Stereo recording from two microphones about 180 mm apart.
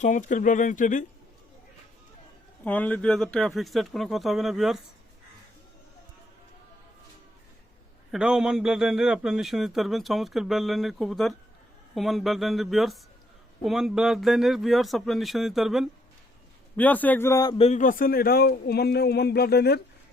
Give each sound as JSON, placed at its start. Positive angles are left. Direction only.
{"t": 0.0, "sound": "speech", "side_deg": 45}
{"t": 2.6, "sound": "a man's voice", "side_deg": 10}
{"t": 8.1, "sound": "a man's voice", "side_deg": -5}
{"t": 16.7, "sound": "speech", "side_deg": 10}
{"t": 17.6, "sound": "speech", "side_deg": 40}